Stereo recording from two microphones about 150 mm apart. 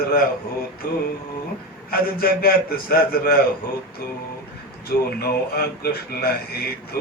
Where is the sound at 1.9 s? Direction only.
85° left.